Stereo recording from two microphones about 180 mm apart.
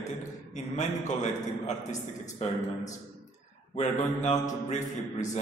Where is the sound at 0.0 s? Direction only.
40° left (ahead or behind).